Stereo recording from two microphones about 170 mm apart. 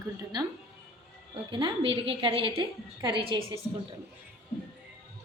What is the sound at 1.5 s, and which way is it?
A woman's voice, 30° right (ahead or behind).